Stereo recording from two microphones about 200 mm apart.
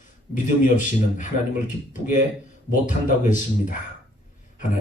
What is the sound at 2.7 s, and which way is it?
Speech, 40° left (ahead or behind).